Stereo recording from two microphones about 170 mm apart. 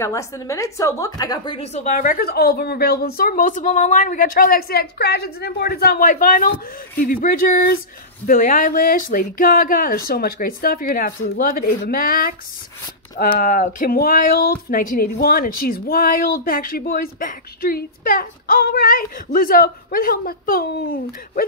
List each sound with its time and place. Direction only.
0.0 s speech: 20° left (ahead or behind); by 21.5 s 65° left (ahead or behind)